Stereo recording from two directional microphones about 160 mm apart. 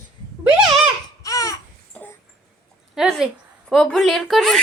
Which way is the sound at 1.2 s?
20° left (ahead or behind).